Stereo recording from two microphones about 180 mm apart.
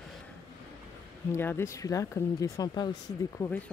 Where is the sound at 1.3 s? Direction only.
15° left (ahead or behind).